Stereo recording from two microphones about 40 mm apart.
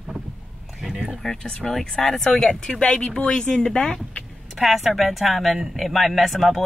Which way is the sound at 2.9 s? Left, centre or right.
Left.